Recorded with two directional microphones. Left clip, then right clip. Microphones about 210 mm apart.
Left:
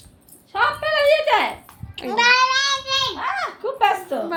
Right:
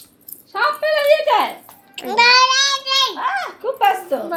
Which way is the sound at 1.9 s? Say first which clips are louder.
Right 4 dB; 5° left (ahead or behind).